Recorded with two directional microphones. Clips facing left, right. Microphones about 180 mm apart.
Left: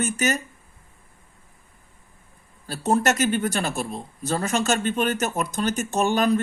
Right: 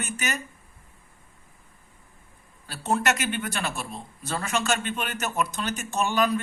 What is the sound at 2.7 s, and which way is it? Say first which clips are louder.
Speech: left 4 dB; 40° left (ahead or behind).